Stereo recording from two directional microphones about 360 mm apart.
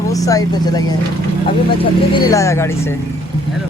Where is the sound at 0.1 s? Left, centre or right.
Centre.